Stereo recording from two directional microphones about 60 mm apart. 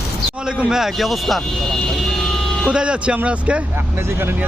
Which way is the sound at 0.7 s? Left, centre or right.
Centre.